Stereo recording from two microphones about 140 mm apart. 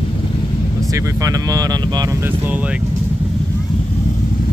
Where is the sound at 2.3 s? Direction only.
10° right (ahead or behind).